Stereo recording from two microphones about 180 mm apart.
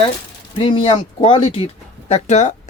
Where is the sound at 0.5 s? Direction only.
30° left (ahead or behind).